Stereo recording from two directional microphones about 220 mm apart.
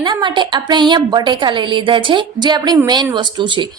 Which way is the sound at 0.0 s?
20° right (ahead or behind).